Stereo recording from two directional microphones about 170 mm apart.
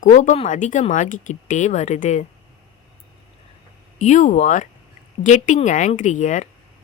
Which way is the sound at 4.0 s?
45° left (ahead or behind).